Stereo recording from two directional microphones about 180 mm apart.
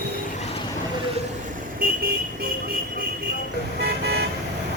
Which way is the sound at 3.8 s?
65° right (ahead or behind).